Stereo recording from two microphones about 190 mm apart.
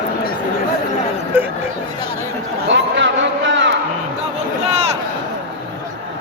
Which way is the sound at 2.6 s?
70° right (ahead or behind).